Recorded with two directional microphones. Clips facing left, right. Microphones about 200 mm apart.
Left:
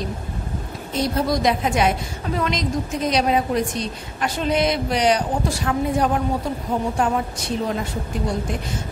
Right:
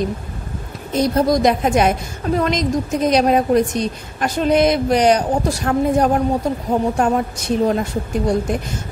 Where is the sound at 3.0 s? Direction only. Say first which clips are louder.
Right 5 dB; 45° right (ahead or behind).